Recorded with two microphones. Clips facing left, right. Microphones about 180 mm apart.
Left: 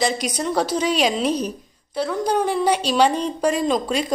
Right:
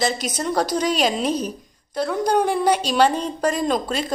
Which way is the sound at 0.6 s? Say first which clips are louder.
Even; 10° left (ahead or behind).